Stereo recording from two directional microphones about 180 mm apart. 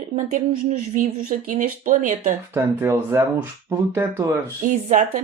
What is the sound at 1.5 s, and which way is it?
Speech, 50° right (ahead or behind).